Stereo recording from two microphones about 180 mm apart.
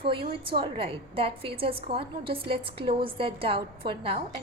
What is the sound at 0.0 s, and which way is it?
A woman's voice, 30° right (ahead or behind).